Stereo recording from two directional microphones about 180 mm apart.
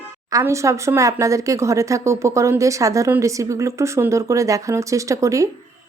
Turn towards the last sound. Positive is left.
turn(degrees=-15)  # may be behind; listen again after turning